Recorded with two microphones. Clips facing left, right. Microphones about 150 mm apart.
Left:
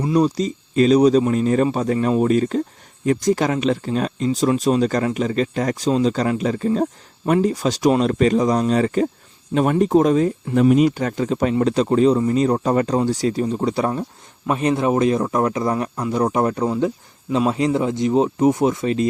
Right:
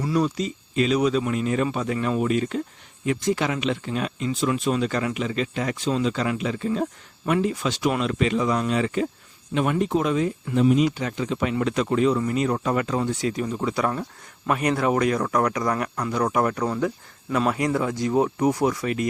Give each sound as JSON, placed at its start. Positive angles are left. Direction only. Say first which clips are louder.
{"t": 0.0, "sound": "speech", "louder": "left 5 dB", "side_deg": 30}
{"t": 10.5, "sound": "speech", "louder": "left 4 dB", "side_deg": 60}